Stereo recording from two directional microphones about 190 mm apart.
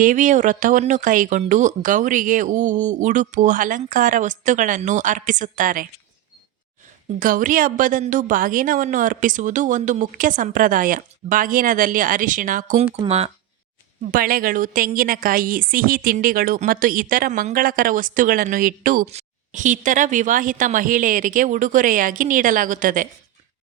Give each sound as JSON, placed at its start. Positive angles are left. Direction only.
{"t": 0.0, "sound": "a woman's voice", "side_deg": -40}
{"t": 7.2, "sound": "a woman's voice", "side_deg": -45}
{"t": 14.0, "sound": "a woman's voice", "side_deg": -45}